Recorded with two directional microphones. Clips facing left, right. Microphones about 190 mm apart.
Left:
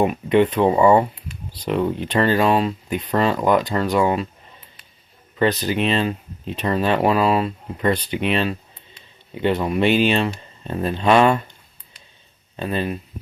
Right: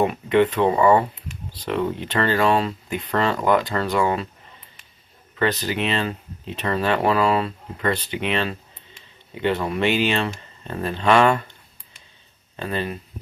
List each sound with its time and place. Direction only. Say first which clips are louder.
0.1 s speech: left 2 dB; 15° left (ahead or behind)
5.4 s speech: left 3 dB; 20° left (ahead or behind)
7.9 s speech: left 3 dB; 20° right (ahead or behind)
9.4 s speech: left 3 dB; 15° left (ahead or behind)
12.5 s speech: left 3 dB; 20° left (ahead or behind)